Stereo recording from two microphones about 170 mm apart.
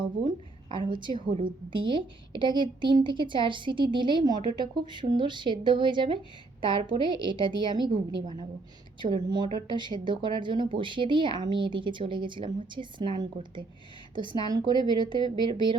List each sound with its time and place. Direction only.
0.0 s a woman's voice: 30° right (ahead or behind)
9.0 s speech: 25° right (ahead or behind)